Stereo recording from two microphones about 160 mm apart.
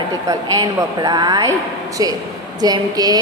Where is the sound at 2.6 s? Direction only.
25° right (ahead or behind).